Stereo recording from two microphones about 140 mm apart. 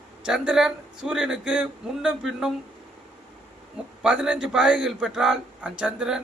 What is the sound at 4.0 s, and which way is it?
Speech, 5° right (ahead or behind).